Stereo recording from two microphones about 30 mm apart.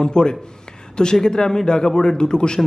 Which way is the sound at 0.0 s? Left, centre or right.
Left.